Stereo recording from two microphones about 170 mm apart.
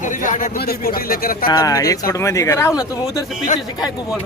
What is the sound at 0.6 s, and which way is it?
Speech, 65° left (ahead or behind).